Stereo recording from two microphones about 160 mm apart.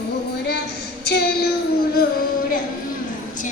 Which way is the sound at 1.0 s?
90° left.